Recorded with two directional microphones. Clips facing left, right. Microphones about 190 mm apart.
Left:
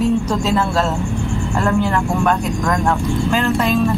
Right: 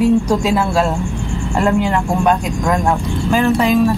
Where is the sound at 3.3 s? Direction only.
15° right (ahead or behind).